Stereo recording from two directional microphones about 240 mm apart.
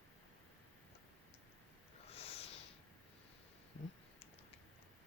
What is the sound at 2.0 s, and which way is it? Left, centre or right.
Snort, left.